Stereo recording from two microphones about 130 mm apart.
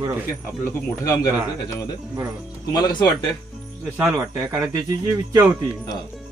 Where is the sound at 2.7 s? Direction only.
30° left (ahead or behind).